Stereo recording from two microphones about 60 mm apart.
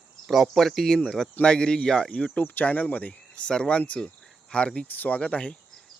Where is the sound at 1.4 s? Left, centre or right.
Centre.